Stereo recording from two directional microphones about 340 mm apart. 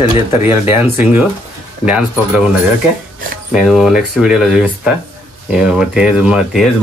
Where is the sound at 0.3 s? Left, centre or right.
Centre.